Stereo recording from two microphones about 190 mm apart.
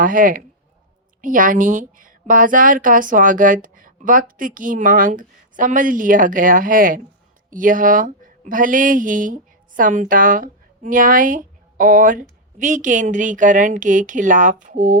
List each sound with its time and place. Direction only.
0.0 s a woman's voice: 45° right (ahead or behind)